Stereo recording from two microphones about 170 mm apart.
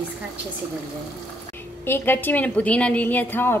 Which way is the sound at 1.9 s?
15° left (ahead or behind).